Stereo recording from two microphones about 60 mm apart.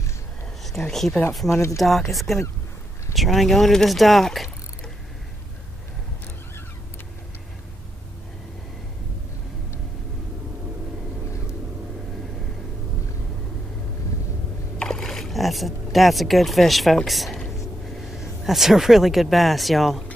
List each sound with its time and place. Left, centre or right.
0.7 s speech: centre
1.5 s speech: left
1.8 s speech: centre
14.8 s a sound: centre
17.8 s speech: centre